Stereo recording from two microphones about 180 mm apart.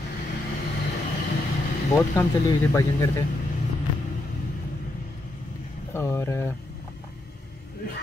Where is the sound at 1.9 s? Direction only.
15° left (ahead or behind).